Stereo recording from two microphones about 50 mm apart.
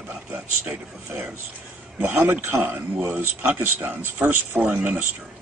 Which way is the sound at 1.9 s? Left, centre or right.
Right.